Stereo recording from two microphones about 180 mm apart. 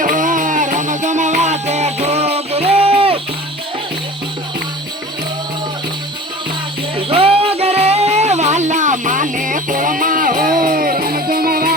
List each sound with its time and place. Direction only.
0.0 s music: 45° right (ahead or behind)
7.1 s music: 30° right (ahead or behind); by 11.7 s 55° right (ahead or behind)